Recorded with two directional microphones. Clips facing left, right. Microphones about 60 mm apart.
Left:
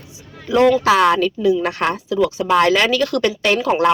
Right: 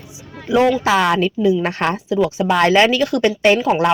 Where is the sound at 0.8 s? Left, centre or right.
Centre.